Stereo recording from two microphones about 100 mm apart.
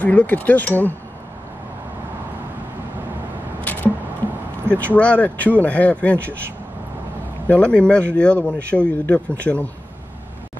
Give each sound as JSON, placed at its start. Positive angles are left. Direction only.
{"t": 0.0, "sound": "speech", "side_deg": 15}
{"t": 3.7, "sound": "a sound", "side_deg": 15}
{"t": 4.7, "sound": "speech", "side_deg": 15}
{"t": 7.4, "sound": "speech", "side_deg": 15}